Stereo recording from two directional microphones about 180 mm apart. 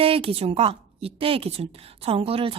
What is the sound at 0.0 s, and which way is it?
Speech, 30° right (ahead or behind).